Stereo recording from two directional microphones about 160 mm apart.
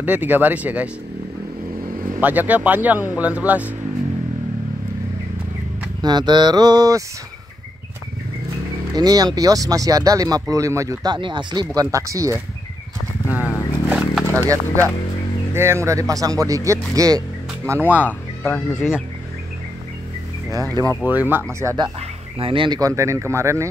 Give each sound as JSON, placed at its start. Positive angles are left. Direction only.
{"t": 0.0, "sound": "speech", "side_deg": -10}
{"t": 2.1, "sound": "speech", "side_deg": -10}
{"t": 6.0, "sound": "speech", "side_deg": -25}
{"t": 8.9, "sound": "speech", "side_deg": -25}
{"t": 11.1, "sound": "speech", "side_deg": -30}
{"t": 13.8, "sound": "a sound", "side_deg": -10}
{"t": 14.2, "sound": "speech", "side_deg": -20}
{"t": 18.0, "sound": "speech", "side_deg": 10}
{"t": 20.5, "sound": "speech", "side_deg": -20}
{"t": 21.0, "sound": "speech", "side_deg": -10}
{"t": 22.4, "sound": "speech", "side_deg": -35}